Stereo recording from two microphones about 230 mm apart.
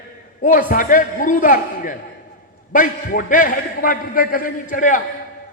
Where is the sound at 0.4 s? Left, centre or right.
Left.